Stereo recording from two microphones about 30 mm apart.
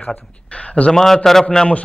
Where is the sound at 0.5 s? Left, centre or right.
Left.